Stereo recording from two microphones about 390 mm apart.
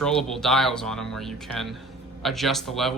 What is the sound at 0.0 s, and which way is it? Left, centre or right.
Speech, centre.